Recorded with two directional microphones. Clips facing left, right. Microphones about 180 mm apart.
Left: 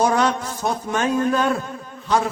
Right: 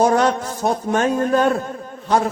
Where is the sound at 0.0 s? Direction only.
40° right (ahead or behind).